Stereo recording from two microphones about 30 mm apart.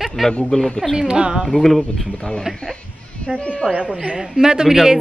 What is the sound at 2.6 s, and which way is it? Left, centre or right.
Speech, left.